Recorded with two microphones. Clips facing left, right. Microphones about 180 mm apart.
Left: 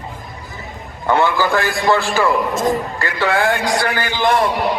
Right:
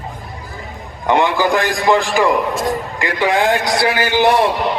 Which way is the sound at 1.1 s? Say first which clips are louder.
Right 1 dB; 15° right (ahead or behind).